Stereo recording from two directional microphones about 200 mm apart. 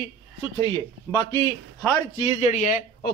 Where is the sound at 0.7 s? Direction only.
15° left (ahead or behind).